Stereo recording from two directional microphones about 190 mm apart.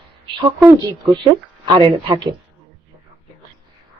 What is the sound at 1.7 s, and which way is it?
Speech, 25° right (ahead or behind).